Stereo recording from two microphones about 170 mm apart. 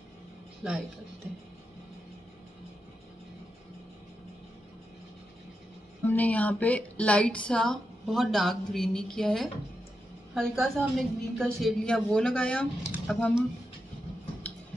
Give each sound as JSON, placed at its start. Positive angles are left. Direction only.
{"t": 0.6, "sound": "speech", "side_deg": -5}
{"t": 6.0, "sound": "a woman's voice", "side_deg": 10}